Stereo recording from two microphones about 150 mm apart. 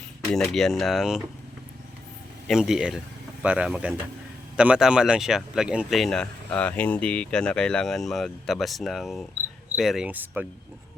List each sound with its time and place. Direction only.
0.3 s speech: centre (ahead or behind)
2.5 s speech: 5° right (ahead or behind)